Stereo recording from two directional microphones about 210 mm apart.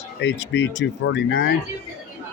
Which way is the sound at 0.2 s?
60° left (ahead or behind).